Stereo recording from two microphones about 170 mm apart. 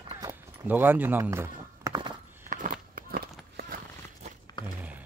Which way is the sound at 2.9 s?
60° right (ahead or behind).